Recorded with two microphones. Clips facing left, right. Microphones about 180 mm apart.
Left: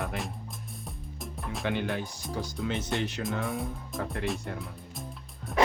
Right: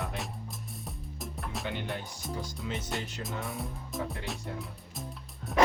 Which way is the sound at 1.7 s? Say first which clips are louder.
Left 8 dB; 85° left.